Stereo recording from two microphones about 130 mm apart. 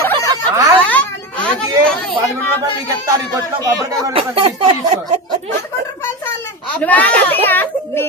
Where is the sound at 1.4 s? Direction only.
5° left (ahead or behind).